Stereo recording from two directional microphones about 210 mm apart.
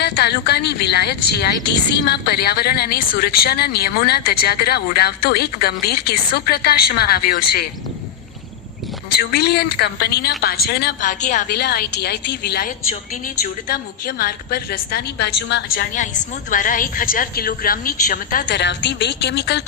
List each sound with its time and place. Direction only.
0.0 s a woman's voice: 50° left (ahead or behind)
9.0 s a woman's voice: 50° left (ahead or behind)
11.5 s a woman's voice: 50° left (ahead or behind)
18.4 s a woman's voice: 55° left (ahead or behind)